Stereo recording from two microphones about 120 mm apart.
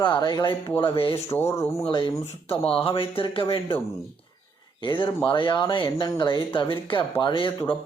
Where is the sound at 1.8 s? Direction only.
45° left (ahead or behind).